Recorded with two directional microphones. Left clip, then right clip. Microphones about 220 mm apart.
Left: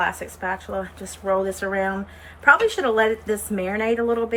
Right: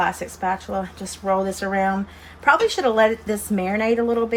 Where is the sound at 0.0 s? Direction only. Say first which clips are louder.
Right 2 dB; 40° right (ahead or behind).